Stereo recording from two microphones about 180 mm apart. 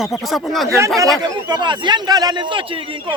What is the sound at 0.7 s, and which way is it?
A man's voice, 15° right (ahead or behind).